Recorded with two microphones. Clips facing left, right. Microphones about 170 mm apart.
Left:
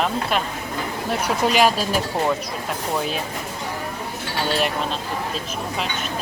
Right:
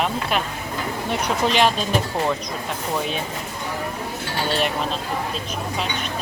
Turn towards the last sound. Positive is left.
turn(degrees=0)  # may be behind; listen again after turning